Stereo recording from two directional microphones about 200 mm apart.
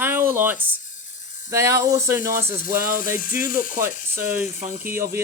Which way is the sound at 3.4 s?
45° left (ahead or behind).